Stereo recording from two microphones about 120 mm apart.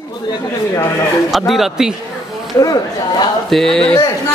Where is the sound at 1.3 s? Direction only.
Centre (ahead or behind).